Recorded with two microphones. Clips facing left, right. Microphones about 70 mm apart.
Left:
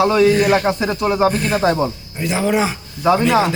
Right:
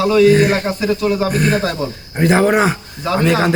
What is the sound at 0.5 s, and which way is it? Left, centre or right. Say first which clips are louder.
Speech: even; left.